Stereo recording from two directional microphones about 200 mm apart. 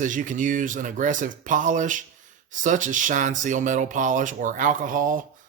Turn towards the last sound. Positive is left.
turn(degrees=-40)  # may be behind; listen again after turning